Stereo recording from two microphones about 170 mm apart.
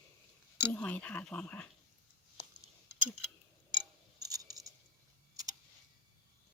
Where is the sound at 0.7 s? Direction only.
5° left (ahead or behind).